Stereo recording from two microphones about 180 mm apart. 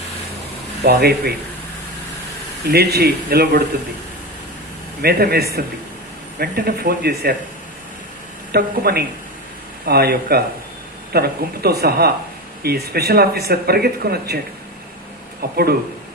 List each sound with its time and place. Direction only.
0.9 s speech: 60° right (ahead or behind)
2.6 s speech: 60° right (ahead or behind)
5.0 s speech: 60° right (ahead or behind)
8.5 s speech: 60° right (ahead or behind)
15.4 s speech: 60° right (ahead or behind)